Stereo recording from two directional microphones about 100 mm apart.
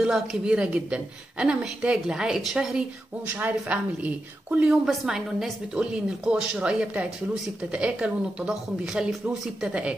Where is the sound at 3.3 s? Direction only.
15° right (ahead or behind).